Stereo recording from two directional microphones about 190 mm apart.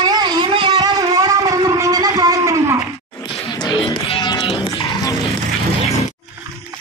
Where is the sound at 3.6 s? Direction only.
25° left (ahead or behind).